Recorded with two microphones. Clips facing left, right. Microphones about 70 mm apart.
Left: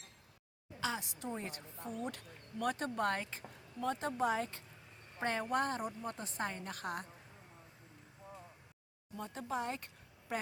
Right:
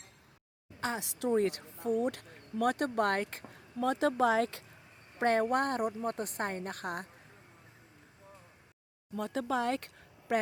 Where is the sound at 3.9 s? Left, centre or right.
Right.